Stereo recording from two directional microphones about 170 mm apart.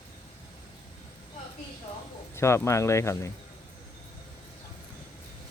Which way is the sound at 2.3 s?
15° left (ahead or behind).